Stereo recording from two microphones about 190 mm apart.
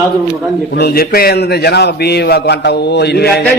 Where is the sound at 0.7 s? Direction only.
55° left (ahead or behind).